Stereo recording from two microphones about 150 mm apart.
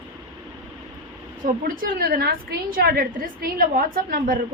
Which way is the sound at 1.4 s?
70° right (ahead or behind).